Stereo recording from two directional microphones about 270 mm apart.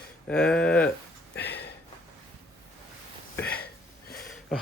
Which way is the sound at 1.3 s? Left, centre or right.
Left.